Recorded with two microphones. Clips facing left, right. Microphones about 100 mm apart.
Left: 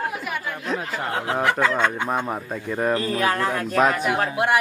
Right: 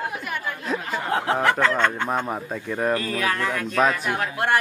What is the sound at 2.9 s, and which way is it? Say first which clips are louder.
Chicken: left 4 dB; 30° left (ahead or behind).